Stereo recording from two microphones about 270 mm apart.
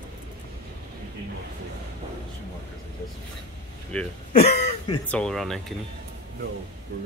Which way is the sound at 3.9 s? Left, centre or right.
Centre.